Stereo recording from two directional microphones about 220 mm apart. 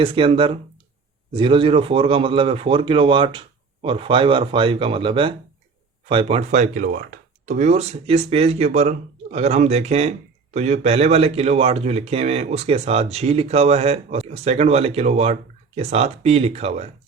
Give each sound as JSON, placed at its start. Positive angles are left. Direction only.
{"t": 0.0, "sound": "speech", "side_deg": -25}